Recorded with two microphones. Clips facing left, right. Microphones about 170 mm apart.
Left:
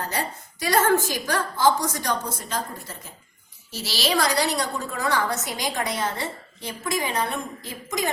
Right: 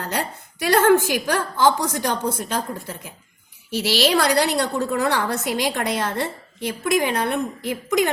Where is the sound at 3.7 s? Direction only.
65° right (ahead or behind).